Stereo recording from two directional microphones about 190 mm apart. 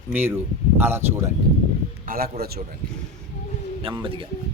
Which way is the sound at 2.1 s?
50° right (ahead or behind).